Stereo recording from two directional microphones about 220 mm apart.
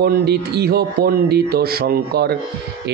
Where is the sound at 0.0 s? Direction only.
50° right (ahead or behind).